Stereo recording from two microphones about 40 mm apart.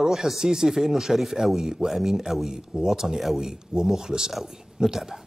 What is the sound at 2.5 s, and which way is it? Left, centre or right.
A woman's voice, centre.